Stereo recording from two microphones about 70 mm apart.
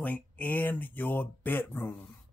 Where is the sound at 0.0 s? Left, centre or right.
Left.